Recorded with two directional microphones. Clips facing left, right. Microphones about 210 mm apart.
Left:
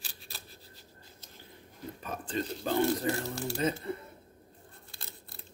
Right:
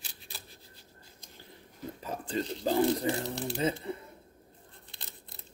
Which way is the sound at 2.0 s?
25° right (ahead or behind).